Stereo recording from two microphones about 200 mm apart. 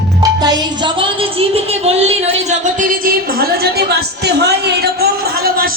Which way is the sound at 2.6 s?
40° right (ahead or behind).